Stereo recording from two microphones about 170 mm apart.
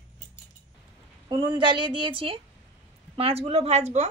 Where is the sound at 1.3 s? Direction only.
25° right (ahead or behind).